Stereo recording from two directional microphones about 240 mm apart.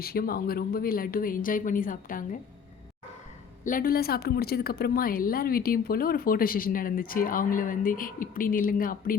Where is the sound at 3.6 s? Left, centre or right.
Left.